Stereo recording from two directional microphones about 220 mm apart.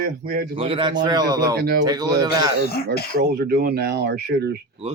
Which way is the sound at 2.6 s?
45° left (ahead or behind).